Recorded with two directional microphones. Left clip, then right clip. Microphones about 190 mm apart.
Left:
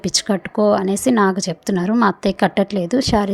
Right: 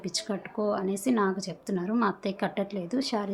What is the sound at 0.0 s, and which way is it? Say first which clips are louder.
A woman's voice: left 13 dB; 40° left (ahead or behind).